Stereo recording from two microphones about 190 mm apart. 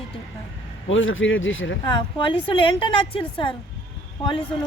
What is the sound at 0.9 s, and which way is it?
Speech, 90° left.